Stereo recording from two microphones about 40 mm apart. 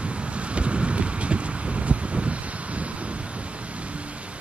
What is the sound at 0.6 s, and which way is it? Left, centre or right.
Wind noise, right.